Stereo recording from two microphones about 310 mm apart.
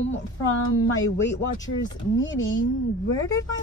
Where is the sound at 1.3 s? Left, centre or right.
Centre.